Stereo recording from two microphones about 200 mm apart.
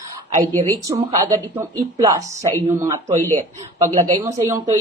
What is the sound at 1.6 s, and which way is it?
Speech, 15° right (ahead or behind).